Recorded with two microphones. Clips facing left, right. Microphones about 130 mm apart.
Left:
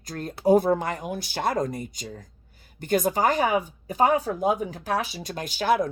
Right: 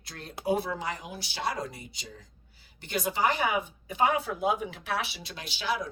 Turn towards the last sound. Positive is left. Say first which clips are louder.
# left 9 dB
turn(degrees=50)  # may be behind; listen again after turning